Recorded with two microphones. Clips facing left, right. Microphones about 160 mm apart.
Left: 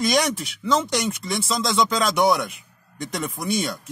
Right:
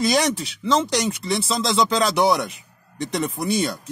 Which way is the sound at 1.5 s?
30° right (ahead or behind).